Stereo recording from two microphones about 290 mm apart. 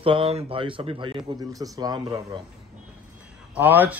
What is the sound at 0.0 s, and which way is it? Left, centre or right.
Speech, centre.